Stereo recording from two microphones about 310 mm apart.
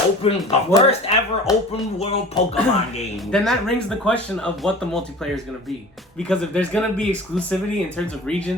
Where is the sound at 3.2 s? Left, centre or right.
Centre.